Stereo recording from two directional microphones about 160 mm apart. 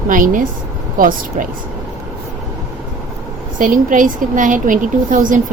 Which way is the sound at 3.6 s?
55° right (ahead or behind).